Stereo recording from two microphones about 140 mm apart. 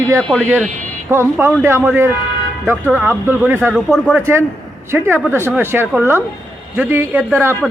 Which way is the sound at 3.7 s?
5° right (ahead or behind).